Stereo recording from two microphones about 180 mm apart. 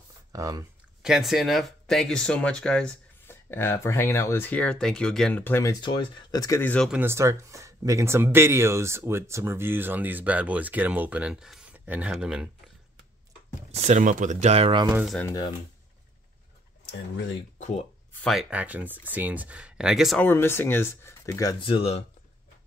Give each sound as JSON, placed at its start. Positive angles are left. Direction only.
{"t": 0.3, "sound": "speech", "side_deg": -20}
{"t": 1.0, "sound": "speech", "side_deg": 0}
{"t": 6.9, "sound": "speech", "side_deg": -10}
{"t": 13.7, "sound": "speech", "side_deg": -40}
{"t": 14.9, "sound": "speech", "side_deg": -10}
{"t": 15.2, "sound": "speech", "side_deg": 20}
{"t": 18.1, "sound": "speech", "side_deg": 0}
{"t": 20.2, "sound": "speech", "side_deg": 10}
{"t": 21.5, "sound": "speech", "side_deg": 30}